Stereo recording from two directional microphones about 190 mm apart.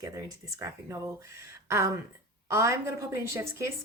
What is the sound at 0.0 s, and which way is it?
A woman's voice, 15° right (ahead or behind).